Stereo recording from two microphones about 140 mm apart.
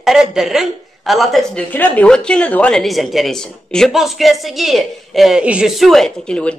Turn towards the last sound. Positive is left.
turn(degrees=5)  # may be behind; listen again after turning